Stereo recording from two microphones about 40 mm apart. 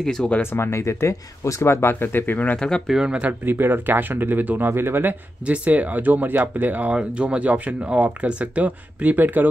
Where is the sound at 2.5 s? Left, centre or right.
Centre.